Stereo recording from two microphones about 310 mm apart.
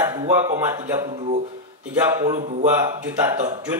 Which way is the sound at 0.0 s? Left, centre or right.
Centre.